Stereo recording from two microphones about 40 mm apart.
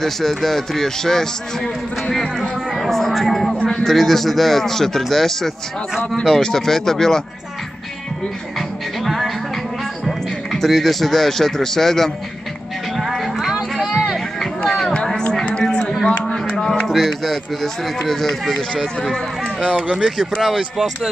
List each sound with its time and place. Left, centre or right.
0.0 s a man's voice: centre
2.7 s a sound: centre
3.5 s a sound: left
3.8 s a man's voice: centre
8.5 s music: centre
10.0 s speech: centre
12.9 s music: centre
13.6 s a sound: centre
15.6 s a sound: centre
17.9 s a man's voice: centre
19.1 s a man's voice: centre
20.0 s speech: centre